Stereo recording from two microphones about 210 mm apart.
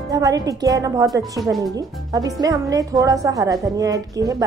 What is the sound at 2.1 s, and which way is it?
A woman's voice, 15° right (ahead or behind).